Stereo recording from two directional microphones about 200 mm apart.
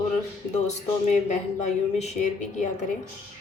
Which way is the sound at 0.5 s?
35° left (ahead or behind).